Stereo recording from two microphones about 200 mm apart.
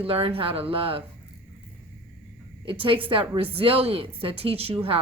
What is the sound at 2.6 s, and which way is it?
A woman's voice, 25° right (ahead or behind).